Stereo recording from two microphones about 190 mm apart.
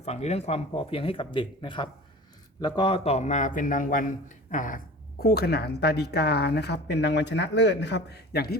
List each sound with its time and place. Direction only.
0.0 s speech: 35° left (ahead or behind)
5.2 s speech: 55° left (ahead or behind)